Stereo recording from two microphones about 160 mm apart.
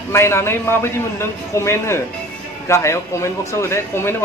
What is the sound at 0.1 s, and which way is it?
A man's voice, 15° left (ahead or behind).